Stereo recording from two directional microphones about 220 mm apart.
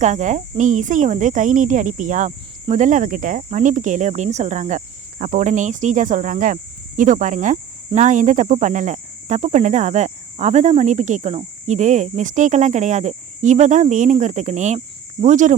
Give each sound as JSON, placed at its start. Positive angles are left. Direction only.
{"t": 0.0, "sound": "cricket", "side_deg": -35}